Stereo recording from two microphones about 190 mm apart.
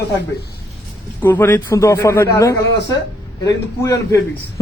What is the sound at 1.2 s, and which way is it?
A man's voice, 10° left (ahead or behind).